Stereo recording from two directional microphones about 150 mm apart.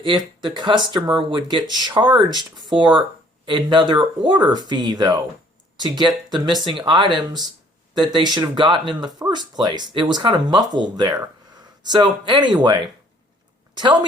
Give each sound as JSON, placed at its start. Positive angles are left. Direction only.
{"t": 0.0, "sound": "speech", "side_deg": -30}